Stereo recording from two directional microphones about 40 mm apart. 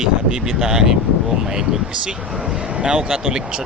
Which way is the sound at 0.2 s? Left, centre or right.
Right.